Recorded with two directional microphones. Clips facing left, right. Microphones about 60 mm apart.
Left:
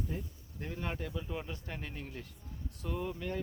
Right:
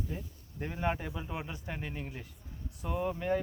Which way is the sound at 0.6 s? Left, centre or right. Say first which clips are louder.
Right 5 dB; centre.